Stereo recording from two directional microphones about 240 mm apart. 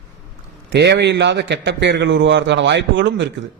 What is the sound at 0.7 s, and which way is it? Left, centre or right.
Speech, right.